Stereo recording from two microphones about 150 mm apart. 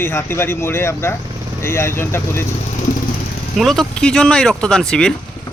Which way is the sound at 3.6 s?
Centre (ahead or behind).